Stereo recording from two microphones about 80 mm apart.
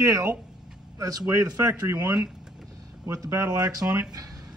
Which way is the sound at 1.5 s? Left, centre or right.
Right.